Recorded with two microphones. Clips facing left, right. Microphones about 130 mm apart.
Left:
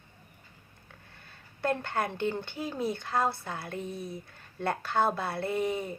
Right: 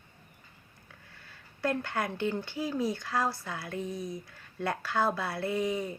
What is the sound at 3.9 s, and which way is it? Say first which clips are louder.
Speech: right 1 dB; 15° right (ahead or behind).